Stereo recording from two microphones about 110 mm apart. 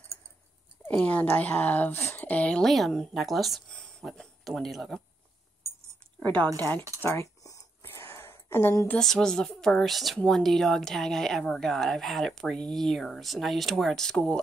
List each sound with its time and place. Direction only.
0.8 s speech: 10° left (ahead or behind)
7.0 s a sound: 25° left (ahead or behind)
8.9 s speech: 5° left (ahead or behind)